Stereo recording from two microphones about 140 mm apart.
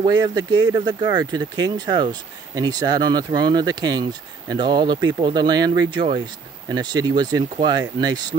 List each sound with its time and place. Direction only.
0.0 s speech: 30° right (ahead or behind)